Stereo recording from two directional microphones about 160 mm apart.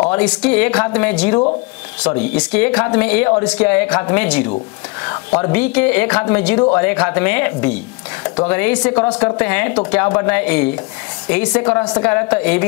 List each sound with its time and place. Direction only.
0.1 s speech: 5° left (ahead or behind)